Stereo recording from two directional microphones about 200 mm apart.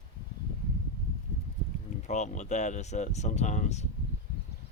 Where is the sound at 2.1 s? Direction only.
35° left (ahead or behind).